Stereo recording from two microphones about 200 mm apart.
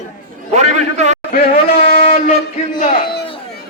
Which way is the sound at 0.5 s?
35° right (ahead or behind).